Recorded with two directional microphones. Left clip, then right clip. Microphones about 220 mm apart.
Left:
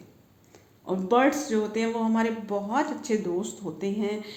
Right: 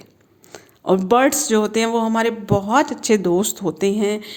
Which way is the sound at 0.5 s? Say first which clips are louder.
Right 13 dB; 50° right (ahead or behind).